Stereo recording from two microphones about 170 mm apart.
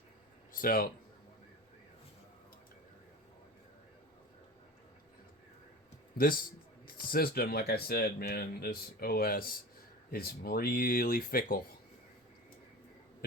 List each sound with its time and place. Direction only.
0.5 s speech: 55° left (ahead or behind)
6.1 s speech: 60° left (ahead or behind)